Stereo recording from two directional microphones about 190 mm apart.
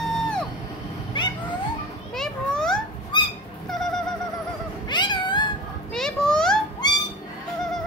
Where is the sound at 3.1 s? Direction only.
25° left (ahead or behind).